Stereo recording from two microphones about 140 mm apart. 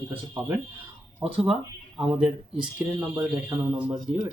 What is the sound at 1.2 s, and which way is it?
Speech, 5° right (ahead or behind).